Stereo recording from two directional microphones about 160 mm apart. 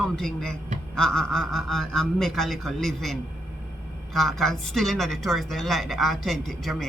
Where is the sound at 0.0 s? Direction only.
5° left (ahead or behind).